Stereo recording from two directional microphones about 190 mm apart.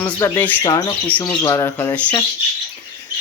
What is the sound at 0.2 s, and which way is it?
Speech, 15° left (ahead or behind).